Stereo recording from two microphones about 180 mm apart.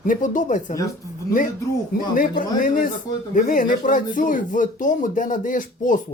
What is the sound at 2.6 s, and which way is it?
Speech, 50° left (ahead or behind).